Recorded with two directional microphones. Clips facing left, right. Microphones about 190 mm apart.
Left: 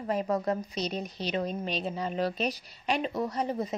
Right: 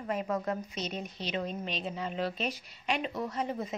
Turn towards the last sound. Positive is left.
turn(degrees=35)  # may be behind; listen again after turning